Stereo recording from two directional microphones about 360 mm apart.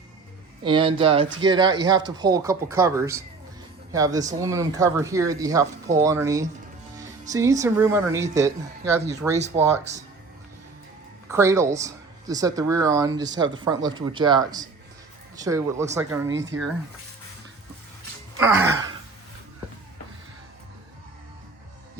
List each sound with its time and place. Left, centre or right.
0.6 s speech: centre
11.3 s speech: centre
18.3 s gasp: centre